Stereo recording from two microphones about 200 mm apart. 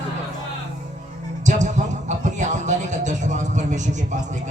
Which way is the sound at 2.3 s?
35° right (ahead or behind).